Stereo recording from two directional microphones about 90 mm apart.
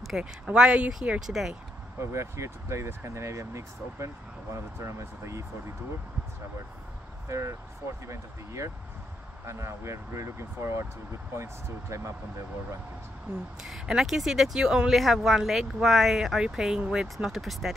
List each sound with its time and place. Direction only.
0.0 s a sound: centre (ahead or behind)
0.5 s speech: 10° right (ahead or behind)
2.0 s speech: 30° right (ahead or behind)
7.2 s speech: 35° right (ahead or behind)
13.6 s speech: 5° right (ahead or behind)